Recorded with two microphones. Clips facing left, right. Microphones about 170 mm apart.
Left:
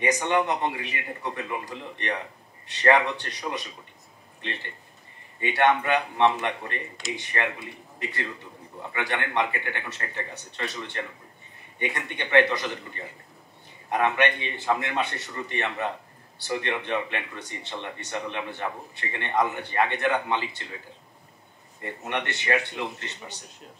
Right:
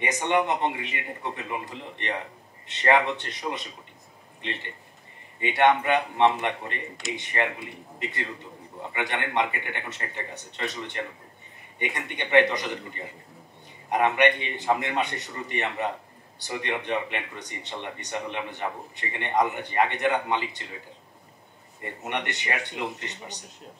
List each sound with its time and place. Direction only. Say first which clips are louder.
0.0 s a man's voice: left 1 dB; 20° right (ahead or behind)
5.4 s a man's voice: right 1 dB; 20° right (ahead or behind)
21.8 s speech: left 1 dB; 15° right (ahead or behind)